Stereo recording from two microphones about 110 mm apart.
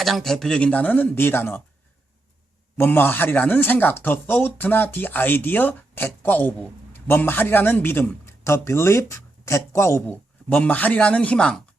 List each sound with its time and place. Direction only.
0.0 s speech: centre (ahead or behind); by 1.6 s 20° left (ahead or behind)
2.7 s speech: 20° left (ahead or behind)
10.5 s speech: 15° left (ahead or behind)